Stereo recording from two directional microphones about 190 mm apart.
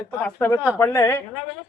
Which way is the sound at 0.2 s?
5° left (ahead or behind).